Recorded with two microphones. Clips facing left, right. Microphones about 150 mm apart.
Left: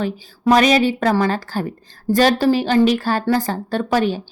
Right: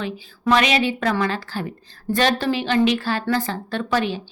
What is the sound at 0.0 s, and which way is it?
A woman's voice, 40° left (ahead or behind).